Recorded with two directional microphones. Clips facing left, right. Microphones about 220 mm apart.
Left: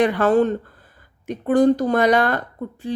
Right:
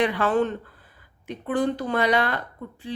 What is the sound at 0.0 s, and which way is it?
Speech, 45° left (ahead or behind).